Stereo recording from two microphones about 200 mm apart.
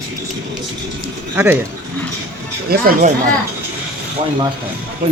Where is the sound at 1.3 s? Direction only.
10° right (ahead or behind).